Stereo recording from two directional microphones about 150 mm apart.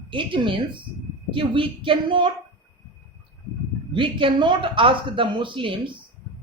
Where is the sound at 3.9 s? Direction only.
35° right (ahead or behind).